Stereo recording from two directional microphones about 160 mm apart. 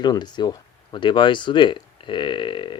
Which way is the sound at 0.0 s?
25° left (ahead or behind).